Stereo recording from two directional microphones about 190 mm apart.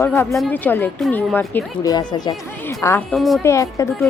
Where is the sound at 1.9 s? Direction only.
20° left (ahead or behind).